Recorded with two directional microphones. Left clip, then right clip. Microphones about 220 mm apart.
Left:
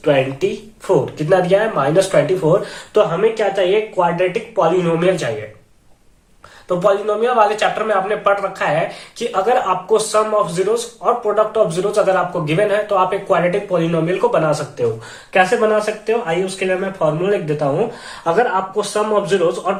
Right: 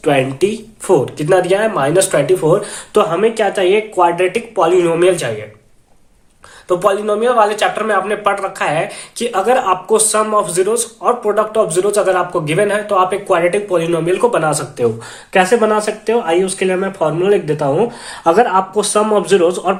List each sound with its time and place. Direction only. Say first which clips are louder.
0.0 s speech: right 2 dB; 50° right (ahead or behind)
6.7 s speech: right 2 dB; 40° right (ahead or behind)